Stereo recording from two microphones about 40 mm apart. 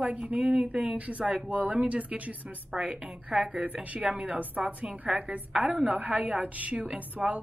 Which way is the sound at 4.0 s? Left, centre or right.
Right.